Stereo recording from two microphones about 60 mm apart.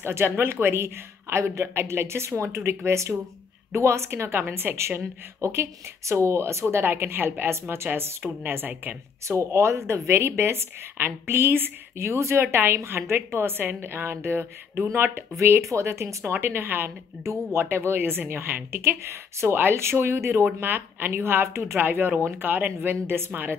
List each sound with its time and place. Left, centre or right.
0.0 s speech: right
6.9 s speech: right
9.3 s speech: right
16.3 s speech: right
20.4 s speech: right